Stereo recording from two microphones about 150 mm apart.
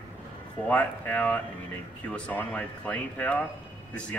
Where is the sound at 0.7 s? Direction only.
10° left (ahead or behind).